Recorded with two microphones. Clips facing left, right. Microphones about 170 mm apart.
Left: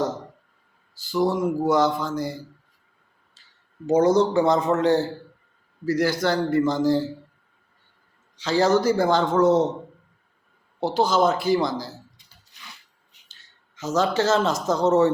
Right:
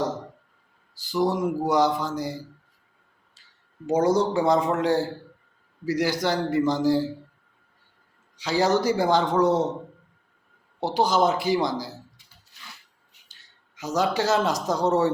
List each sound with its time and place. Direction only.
0.9 s speech: 15° right (ahead or behind)
3.8 s speech: 10° right (ahead or behind)
8.4 s speech: 15° right (ahead or behind)
10.8 s speech: 15° right (ahead or behind)
13.7 s speech: 15° right (ahead or behind)